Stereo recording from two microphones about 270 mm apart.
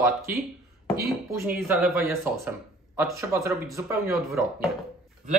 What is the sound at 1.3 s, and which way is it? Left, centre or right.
Speech, centre.